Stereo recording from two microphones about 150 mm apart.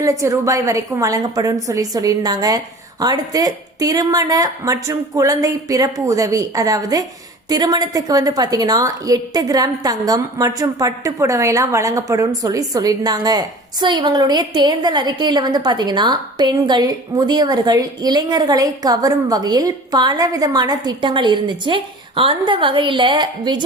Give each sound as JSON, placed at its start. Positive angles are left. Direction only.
{"t": 0.0, "sound": "a woman's voice", "side_deg": -20}